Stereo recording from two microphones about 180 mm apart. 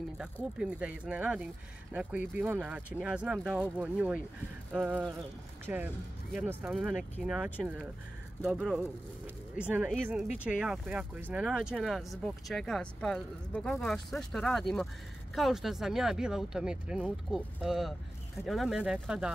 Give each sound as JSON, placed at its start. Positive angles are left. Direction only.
{"t": 0.2, "sound": "speech", "side_deg": -5}